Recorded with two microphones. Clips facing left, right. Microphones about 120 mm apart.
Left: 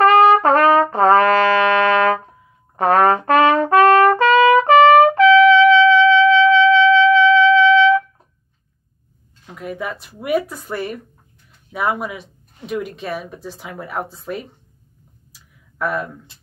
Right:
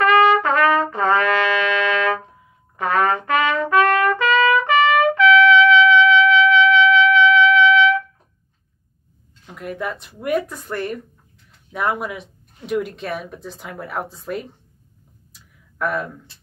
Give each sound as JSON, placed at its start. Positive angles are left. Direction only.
{"t": 0.0, "sound": "trumpet", "side_deg": 40}
{"t": 9.5, "sound": "speech", "side_deg": 0}
{"t": 15.3, "sound": "a sound", "side_deg": 5}